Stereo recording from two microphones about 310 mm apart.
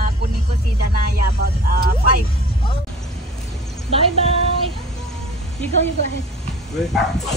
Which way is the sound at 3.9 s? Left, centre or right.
Centre.